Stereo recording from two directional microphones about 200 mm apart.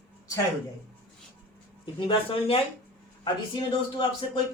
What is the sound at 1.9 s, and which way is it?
Speech, 25° left (ahead or behind).